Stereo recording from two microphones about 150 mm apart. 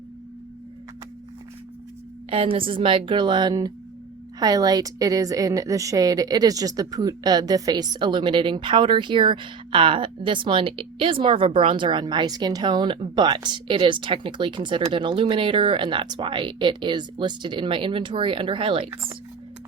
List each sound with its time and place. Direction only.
2.3 s a woman's voice: 35° right (ahead or behind)